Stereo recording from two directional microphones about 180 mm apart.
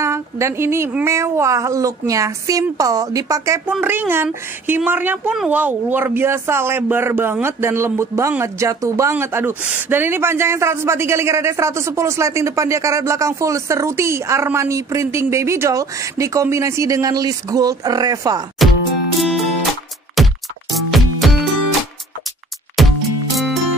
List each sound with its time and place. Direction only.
0.0 s speech: 15° right (ahead or behind)
18.6 s music: centre (ahead or behind)
20.2 s music: centre (ahead or behind)
22.8 s music: centre (ahead or behind)